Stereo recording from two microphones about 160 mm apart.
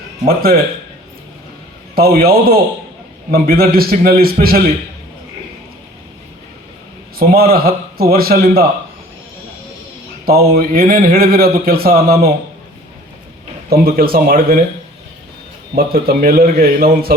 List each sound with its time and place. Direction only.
0.3 s a man's voice: 70° right (ahead or behind)
2.0 s a man's voice: 70° right (ahead or behind)
7.2 s a man's voice: 70° right (ahead or behind)
10.2 s a man's voice: 70° right (ahead or behind)
13.7 s a man's voice: 70° right (ahead or behind)
15.7 s a man's voice: 70° right (ahead or behind)